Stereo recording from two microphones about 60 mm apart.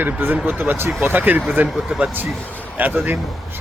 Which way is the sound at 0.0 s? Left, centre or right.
Right.